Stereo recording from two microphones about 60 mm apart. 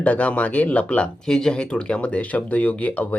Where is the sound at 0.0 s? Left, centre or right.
Left.